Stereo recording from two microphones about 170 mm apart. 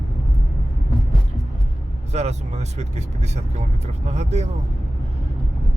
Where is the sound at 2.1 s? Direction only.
40° right (ahead or behind).